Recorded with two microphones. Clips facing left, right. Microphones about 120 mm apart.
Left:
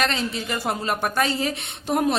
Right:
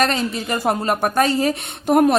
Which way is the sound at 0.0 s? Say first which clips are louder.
Right 5 dB; 45° right (ahead or behind).